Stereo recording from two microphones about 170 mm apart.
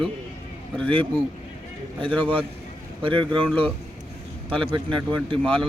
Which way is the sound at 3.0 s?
30° right (ahead or behind).